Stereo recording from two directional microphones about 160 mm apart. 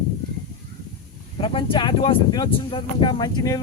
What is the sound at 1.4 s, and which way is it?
Speech, 35° left (ahead or behind).